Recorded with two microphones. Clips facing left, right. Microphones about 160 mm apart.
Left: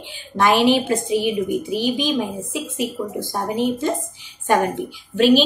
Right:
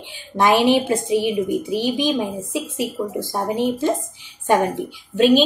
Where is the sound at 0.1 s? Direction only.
20° right (ahead or behind).